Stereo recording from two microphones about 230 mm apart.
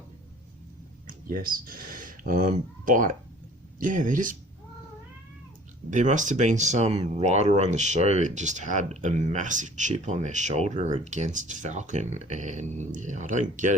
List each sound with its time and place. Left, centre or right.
1.0 s speech: right
5.9 s speech: right